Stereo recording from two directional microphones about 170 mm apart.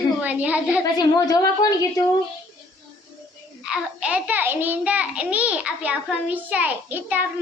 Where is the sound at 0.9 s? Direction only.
20° left (ahead or behind).